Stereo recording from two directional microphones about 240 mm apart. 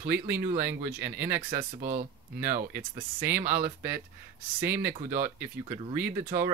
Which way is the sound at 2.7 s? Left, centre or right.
Centre.